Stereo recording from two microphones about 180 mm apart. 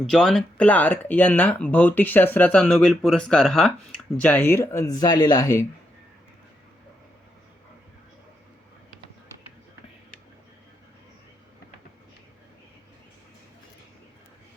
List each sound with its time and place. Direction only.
0.0 s speech: 5° left (ahead or behind); by 5.6 s 20° left (ahead or behind)